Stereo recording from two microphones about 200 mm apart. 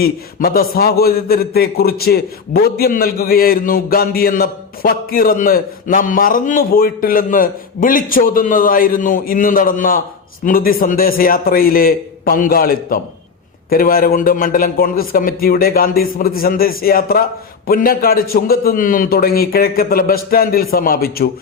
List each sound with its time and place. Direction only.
0.0 s a man's voice: 50° left (ahead or behind)